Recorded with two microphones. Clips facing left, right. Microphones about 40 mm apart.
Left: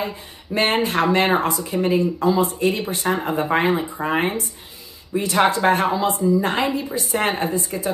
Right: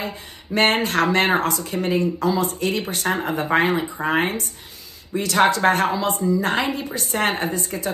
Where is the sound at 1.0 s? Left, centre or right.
Right.